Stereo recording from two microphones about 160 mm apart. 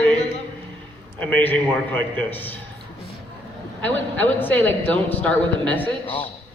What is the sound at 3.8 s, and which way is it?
A man's voice, 10° left (ahead or behind).